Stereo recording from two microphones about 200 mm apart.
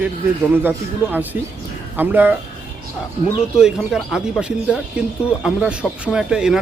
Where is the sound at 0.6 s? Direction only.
10° right (ahead or behind).